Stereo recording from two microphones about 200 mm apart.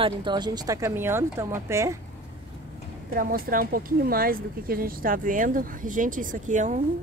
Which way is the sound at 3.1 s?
45° right (ahead or behind).